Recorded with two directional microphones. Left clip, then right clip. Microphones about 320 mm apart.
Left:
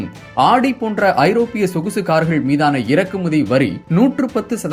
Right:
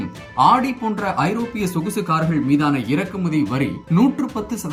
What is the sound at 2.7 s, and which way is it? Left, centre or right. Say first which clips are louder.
Speech: left 6 dB; centre.